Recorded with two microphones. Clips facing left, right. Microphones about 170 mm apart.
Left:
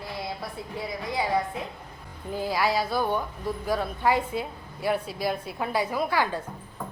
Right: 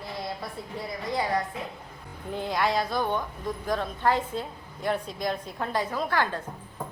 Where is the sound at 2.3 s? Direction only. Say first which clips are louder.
Left 1 dB; 5° left (ahead or behind).